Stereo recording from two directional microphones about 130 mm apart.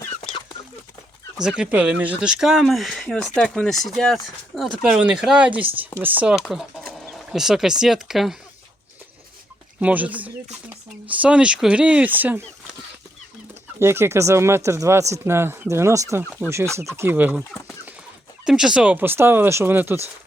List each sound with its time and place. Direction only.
1.4 s speech: 5° right (ahead or behind)
6.8 s chicken: 5° left (ahead or behind)
7.3 s speech: 5° right (ahead or behind)
9.8 s speech: 10° right (ahead or behind)
13.7 s speech: 20° right (ahead or behind)
18.4 s speech: 5° right (ahead or behind)